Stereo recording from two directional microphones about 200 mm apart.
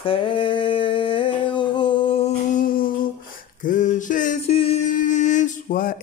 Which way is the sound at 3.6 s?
40° left (ahead or behind).